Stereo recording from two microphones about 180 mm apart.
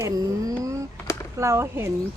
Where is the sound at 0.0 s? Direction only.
20° right (ahead or behind).